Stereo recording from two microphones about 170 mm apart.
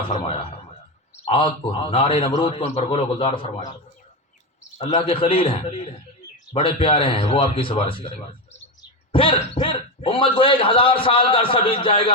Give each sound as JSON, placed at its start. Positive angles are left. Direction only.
{"t": 0.1, "sound": "speech", "side_deg": 35}
{"t": 4.9, "sound": "speech", "side_deg": 30}